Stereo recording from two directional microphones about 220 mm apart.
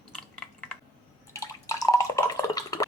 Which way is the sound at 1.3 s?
15° left (ahead or behind).